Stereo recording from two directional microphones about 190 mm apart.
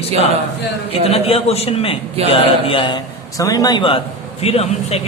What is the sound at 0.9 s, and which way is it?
A man's voice, 30° left (ahead or behind).